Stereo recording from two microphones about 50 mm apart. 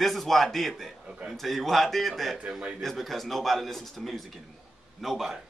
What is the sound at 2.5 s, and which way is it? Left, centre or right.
Speech, centre.